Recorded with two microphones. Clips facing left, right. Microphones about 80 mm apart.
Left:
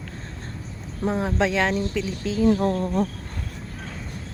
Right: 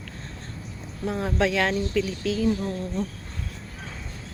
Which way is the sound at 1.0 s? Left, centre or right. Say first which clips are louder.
Left 2 dB; left.